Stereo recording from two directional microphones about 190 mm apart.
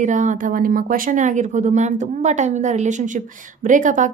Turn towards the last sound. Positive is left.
turn(degrees=-40)  # may be behind; listen again after turning